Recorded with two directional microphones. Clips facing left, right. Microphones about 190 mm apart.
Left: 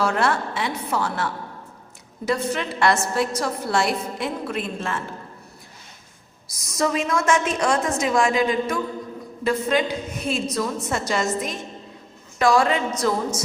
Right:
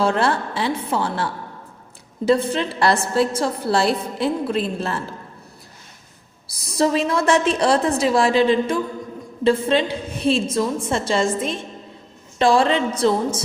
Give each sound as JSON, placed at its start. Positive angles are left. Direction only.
{"t": 0.0, "sound": "a woman's voice", "side_deg": -30}
{"t": 6.6, "sound": "a woman's voice", "side_deg": -30}